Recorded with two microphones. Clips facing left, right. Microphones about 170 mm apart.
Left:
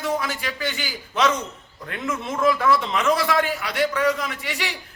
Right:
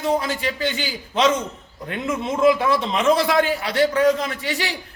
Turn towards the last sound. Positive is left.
turn(degrees=-30)  # may be behind; listen again after turning